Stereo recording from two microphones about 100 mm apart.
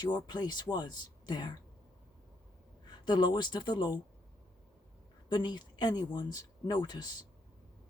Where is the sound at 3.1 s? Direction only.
50° left (ahead or behind).